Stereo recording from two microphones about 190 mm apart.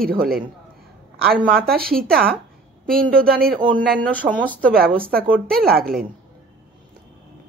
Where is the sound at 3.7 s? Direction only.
10° left (ahead or behind).